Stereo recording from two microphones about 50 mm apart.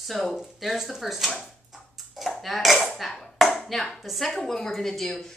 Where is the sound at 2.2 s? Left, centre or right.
Centre.